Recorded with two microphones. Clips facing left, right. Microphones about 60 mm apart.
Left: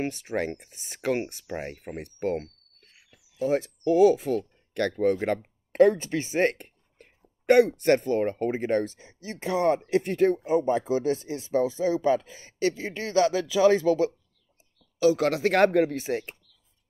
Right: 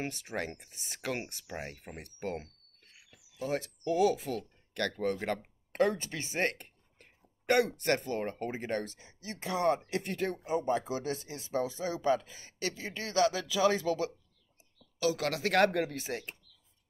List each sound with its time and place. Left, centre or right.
0.0 s speech: left